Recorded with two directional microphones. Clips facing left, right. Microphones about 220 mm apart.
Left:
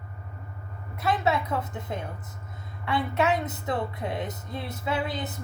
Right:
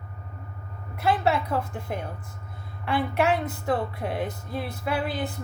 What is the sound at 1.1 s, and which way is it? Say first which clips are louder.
Speech: right 2 dB; 20° left (ahead or behind).